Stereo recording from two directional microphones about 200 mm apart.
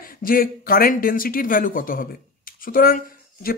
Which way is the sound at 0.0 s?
45° left (ahead or behind).